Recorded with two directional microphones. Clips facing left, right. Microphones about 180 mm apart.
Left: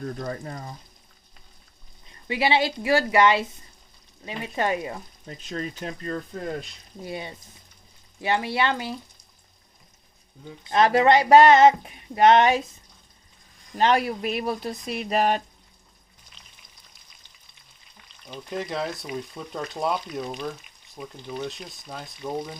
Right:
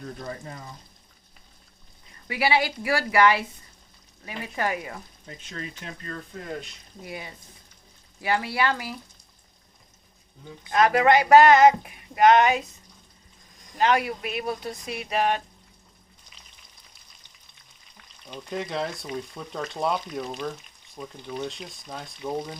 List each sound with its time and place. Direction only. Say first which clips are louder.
0.2 s speech: left 4 dB; 45° left (ahead or behind)
2.2 s speech: left 2 dB; 25° left (ahead or behind)
5.5 s speech: left 6 dB; 40° left (ahead or behind)
10.6 s speech: left 1 dB; 25° left (ahead or behind)
13.7 s speech: left 1 dB; 35° left (ahead or behind)
18.3 s speech: left 1 dB; 5° left (ahead or behind)